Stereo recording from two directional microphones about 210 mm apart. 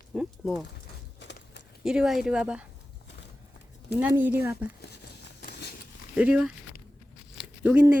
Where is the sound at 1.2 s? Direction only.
55° left (ahead or behind).